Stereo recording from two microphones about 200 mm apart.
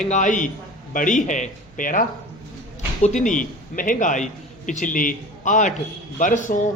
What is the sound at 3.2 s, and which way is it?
A man's voice, 40° left (ahead or behind).